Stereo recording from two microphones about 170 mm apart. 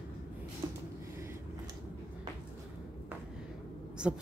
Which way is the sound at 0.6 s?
20° right (ahead or behind).